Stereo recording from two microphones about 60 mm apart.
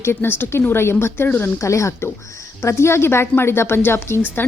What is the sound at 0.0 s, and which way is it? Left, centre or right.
Speech, left.